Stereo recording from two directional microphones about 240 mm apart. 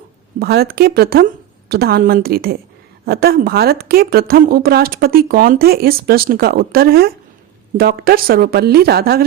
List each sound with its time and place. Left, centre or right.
0.3 s a woman's voice: right